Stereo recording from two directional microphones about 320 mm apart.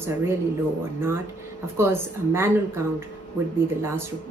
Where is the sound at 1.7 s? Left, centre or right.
Centre.